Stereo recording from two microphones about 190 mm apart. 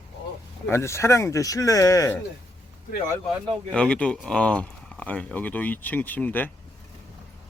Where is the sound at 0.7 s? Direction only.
15° left (ahead or behind).